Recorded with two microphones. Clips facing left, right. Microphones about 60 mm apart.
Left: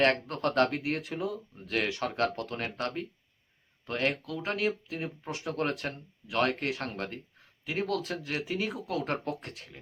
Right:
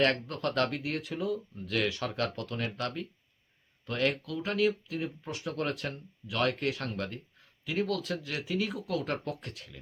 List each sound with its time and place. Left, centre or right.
0.0 s speech: left